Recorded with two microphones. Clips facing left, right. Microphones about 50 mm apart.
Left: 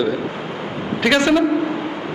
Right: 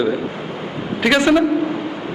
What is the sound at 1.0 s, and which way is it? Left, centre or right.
Speech, centre.